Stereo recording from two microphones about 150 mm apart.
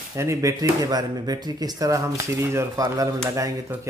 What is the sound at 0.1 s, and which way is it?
Speech, 20° right (ahead or behind).